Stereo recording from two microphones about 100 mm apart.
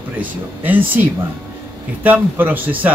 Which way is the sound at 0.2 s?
20° right (ahead or behind).